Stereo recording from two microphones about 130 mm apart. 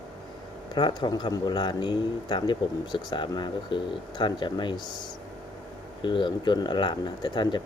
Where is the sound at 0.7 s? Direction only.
35° left (ahead or behind).